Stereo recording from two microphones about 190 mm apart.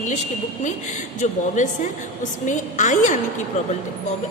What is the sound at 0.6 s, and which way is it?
A woman's voice, 40° left (ahead or behind).